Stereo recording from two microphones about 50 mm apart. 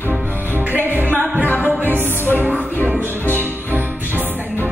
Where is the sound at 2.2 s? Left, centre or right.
Right.